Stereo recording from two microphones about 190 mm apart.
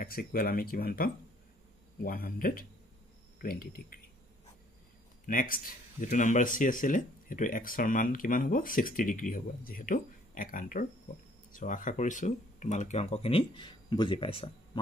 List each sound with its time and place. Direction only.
0.0 s speech: 50° left (ahead or behind)
5.2 s speech: 45° left (ahead or behind); by 14.3 s 25° left (ahead or behind)